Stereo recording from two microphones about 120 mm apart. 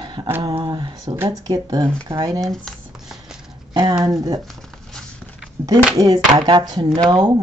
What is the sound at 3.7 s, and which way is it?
Speech, 35° right (ahead or behind).